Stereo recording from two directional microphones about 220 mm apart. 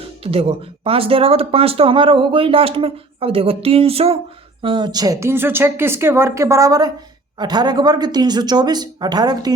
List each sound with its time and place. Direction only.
0.2 s a woman's voice: 25° right (ahead or behind)